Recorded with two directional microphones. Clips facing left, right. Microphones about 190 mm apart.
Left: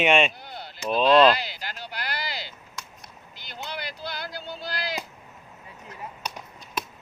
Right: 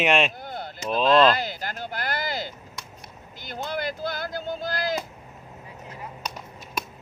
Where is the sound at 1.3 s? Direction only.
50° right (ahead or behind).